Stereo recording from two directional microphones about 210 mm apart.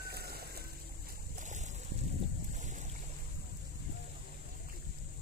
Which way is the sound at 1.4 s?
35° right (ahead or behind).